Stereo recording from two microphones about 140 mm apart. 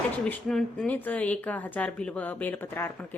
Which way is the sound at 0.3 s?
5° left (ahead or behind).